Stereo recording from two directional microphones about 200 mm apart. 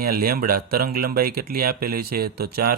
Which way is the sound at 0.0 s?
50° right (ahead or behind).